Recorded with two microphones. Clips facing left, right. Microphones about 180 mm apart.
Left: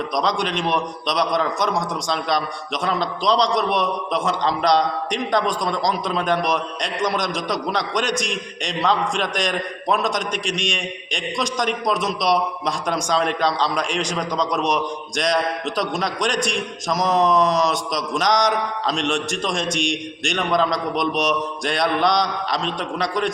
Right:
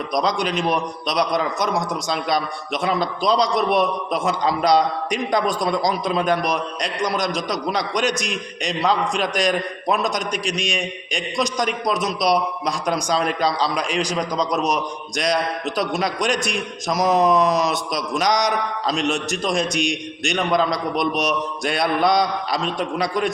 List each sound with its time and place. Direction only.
0.1 s a man's voice: centre (ahead or behind)